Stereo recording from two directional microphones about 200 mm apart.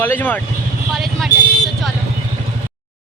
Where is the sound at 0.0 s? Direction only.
10° left (ahead or behind).